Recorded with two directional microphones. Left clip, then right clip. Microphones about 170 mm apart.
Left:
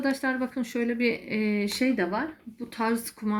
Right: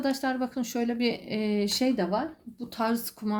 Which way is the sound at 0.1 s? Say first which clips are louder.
Left 1 dB; 35° right (ahead or behind).